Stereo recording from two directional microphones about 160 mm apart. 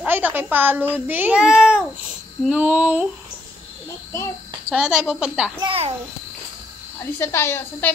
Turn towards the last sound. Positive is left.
turn(degrees=15)  # may be behind; listen again after turning